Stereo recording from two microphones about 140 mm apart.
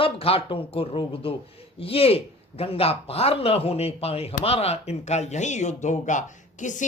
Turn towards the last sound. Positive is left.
turn(degrees=65)  # may be behind; listen again after turning